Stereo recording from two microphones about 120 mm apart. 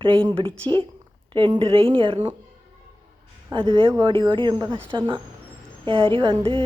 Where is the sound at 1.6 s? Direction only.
50° right (ahead or behind).